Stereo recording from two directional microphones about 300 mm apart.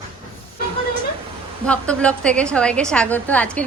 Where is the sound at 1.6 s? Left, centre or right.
Centre.